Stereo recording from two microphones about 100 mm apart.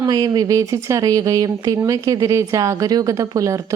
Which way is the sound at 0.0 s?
40° right (ahead or behind).